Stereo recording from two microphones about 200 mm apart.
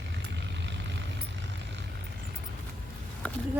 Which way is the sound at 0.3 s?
60° right (ahead or behind).